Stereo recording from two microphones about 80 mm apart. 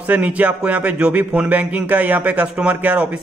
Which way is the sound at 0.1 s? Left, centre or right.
Centre.